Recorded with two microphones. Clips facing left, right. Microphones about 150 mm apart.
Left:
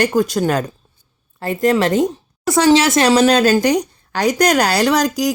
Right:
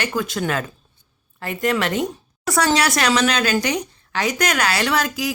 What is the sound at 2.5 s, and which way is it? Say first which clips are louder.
Speech: left 6 dB; 20° left (ahead or behind).